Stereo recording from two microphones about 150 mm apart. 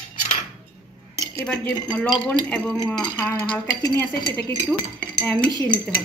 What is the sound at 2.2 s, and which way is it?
A woman's voice, 10° left (ahead or behind).